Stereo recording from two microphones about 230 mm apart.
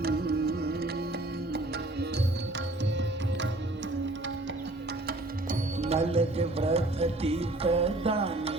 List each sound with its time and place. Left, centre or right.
0.0 s music: right
5.0 s music: right